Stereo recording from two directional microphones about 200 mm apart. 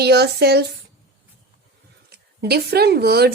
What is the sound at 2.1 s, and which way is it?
A woman's voice, 50° right (ahead or behind).